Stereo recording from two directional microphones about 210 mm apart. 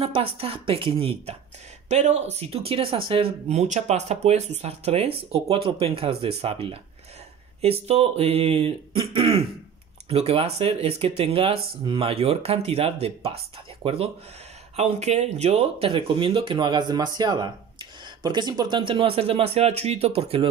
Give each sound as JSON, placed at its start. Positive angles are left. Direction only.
{"t": 0.0, "sound": "speech", "side_deg": -25}